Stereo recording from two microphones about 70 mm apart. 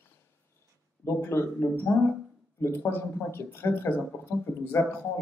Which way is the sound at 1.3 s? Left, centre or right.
Left.